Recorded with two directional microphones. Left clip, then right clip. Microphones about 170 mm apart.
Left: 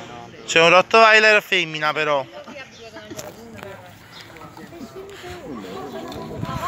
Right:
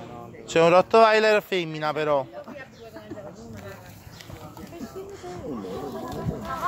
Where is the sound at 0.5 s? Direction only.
20° right (ahead or behind).